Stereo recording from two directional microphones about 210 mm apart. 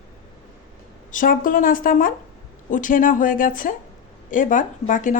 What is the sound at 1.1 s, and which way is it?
Speech, 40° left (ahead or behind).